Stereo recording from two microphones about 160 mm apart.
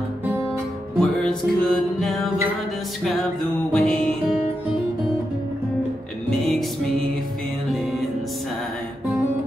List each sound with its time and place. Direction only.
0.9 s music: 5° left (ahead or behind)
3.7 s music: 5° left (ahead or behind)
6.3 s music: centre (ahead or behind)